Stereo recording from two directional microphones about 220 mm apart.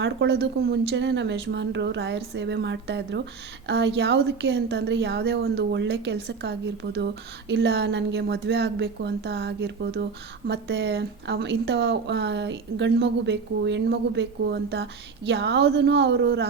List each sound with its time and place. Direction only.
0.0 s a woman's voice: 50° right (ahead or behind)